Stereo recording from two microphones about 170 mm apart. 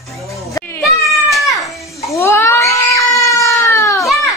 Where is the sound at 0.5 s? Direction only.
15° left (ahead or behind).